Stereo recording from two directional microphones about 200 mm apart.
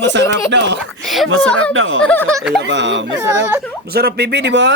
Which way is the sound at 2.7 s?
65° right (ahead or behind).